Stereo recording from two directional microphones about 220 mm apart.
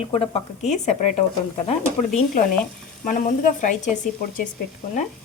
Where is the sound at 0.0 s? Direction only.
25° left (ahead or behind).